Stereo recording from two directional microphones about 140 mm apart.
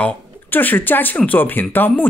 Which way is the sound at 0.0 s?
15° left (ahead or behind).